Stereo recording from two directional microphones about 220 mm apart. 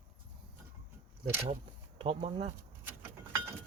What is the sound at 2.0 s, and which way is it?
Speech, 25° right (ahead or behind).